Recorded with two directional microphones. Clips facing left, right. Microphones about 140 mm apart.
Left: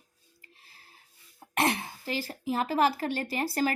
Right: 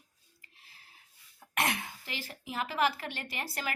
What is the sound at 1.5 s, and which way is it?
Speech, 30° left (ahead or behind).